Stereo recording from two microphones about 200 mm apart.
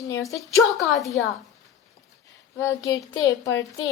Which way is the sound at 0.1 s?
15° left (ahead or behind).